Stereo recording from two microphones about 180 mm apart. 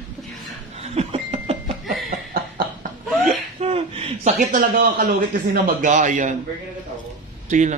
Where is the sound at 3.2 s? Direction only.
35° right (ahead or behind).